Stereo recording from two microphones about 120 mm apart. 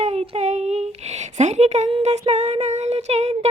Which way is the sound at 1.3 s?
75° right (ahead or behind).